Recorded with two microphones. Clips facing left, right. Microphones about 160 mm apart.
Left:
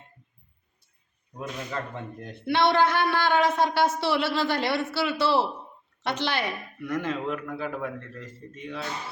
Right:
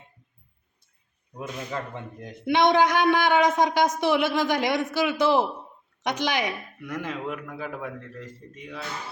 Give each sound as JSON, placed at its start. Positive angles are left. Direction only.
{"t": 2.2, "sound": "a man's voice", "side_deg": -15}